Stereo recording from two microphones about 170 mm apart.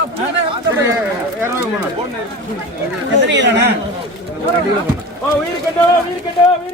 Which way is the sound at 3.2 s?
90° right.